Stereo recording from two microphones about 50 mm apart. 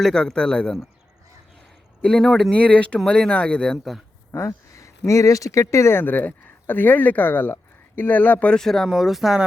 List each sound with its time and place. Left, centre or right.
0.0 s speech: centre
2.0 s speech: centre
2.5 s speech: left
4.3 s speech: left
5.9 s speech: left
8.5 s speech: centre
8.9 s speech: centre